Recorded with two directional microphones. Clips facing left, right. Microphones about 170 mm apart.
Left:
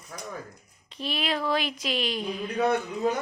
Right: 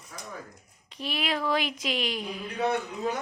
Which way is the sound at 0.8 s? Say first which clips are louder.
Left 1 dB; 10° right (ahead or behind).